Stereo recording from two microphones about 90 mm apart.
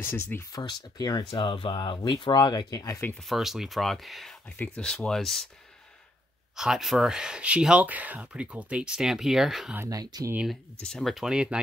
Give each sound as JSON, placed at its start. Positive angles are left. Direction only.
{"t": 0.0, "sound": "speech", "side_deg": 25}
{"t": 0.5, "sound": "speech", "side_deg": 50}
{"t": 1.2, "sound": "speech", "side_deg": 65}
{"t": 3.2, "sound": "speech", "side_deg": 0}
{"t": 4.5, "sound": "speech", "side_deg": 15}
{"t": 6.5, "sound": "speech", "side_deg": -5}
{"t": 9.8, "sound": "speech", "side_deg": -45}
{"t": 10.8, "sound": "speech", "side_deg": 5}